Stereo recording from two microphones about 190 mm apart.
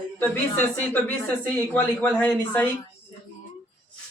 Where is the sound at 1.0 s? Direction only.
10° left (ahead or behind).